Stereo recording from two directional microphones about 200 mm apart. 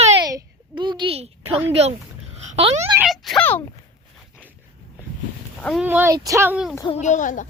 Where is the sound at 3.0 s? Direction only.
Centre (ahead or behind).